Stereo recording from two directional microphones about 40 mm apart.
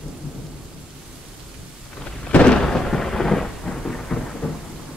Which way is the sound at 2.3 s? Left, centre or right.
Left.